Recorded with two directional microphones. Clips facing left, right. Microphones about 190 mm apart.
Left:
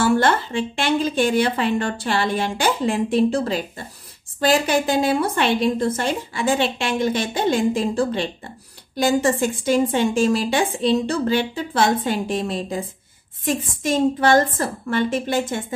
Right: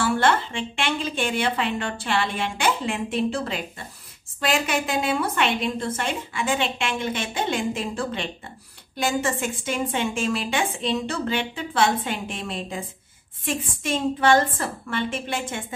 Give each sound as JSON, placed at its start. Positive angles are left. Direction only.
{"t": 0.0, "sound": "a woman's voice", "side_deg": 40}